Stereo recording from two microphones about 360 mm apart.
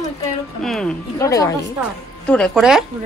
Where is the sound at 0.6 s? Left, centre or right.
Centre.